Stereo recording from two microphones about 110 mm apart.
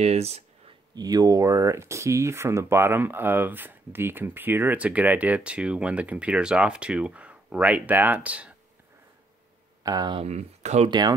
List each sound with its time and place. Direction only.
0.0 s speech: 75° right (ahead or behind)
0.9 s speech: 35° right (ahead or behind); by 8.5 s 10° right (ahead or behind)
9.8 s speech: 35° right (ahead or behind)
10.2 s speech: 85° right
10.9 s speech: 40° right (ahead or behind)